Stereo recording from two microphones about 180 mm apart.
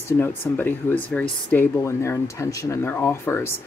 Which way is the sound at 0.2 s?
10° left (ahead or behind).